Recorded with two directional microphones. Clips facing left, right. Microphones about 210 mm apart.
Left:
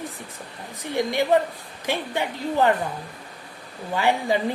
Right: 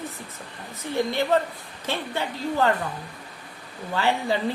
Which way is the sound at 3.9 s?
15° left (ahead or behind).